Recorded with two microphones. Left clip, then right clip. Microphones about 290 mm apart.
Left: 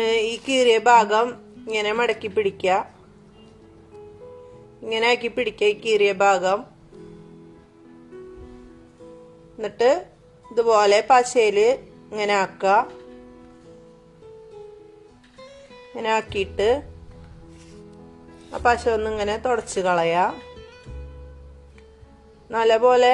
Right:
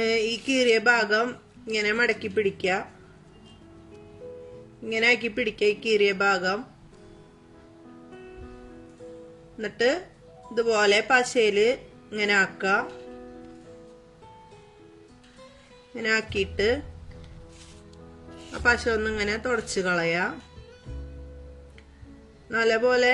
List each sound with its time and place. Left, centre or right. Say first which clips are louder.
0.0 s a sound: left 3 dB; centre
0.6 s speech: left 6 dB; centre
4.8 s speech: left 2 dB; centre
9.6 s speech: left 5 dB; centre
16.0 s speech: left 3 dB; centre
18.9 s speech: left 4 dB; centre
22.5 s speech: left 5 dB; centre